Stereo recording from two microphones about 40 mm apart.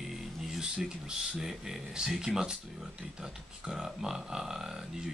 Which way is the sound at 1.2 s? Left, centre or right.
Centre.